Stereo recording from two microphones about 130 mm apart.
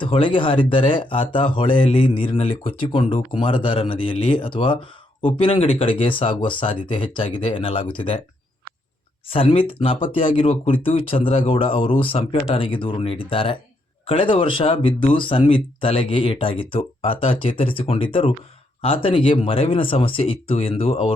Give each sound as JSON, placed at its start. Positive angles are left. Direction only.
{"t": 0.0, "sound": "speech", "side_deg": 40}
{"t": 9.3, "sound": "speech", "side_deg": 45}